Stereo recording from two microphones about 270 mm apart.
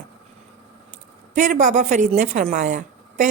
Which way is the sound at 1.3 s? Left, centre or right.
Right.